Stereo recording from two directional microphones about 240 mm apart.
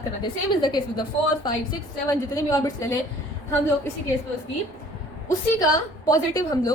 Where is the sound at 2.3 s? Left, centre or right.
Centre.